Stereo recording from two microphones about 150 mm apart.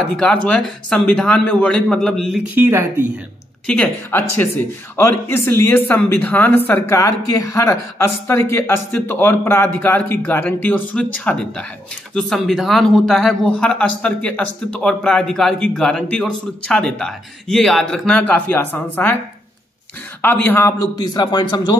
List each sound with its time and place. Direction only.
0.1 s speech: 10° left (ahead or behind)
2.5 s speech: 15° right (ahead or behind)
3.6 s speech: 10° left (ahead or behind)
20.2 s a man's voice: 15° left (ahead or behind); by 21.7 s 30° left (ahead or behind)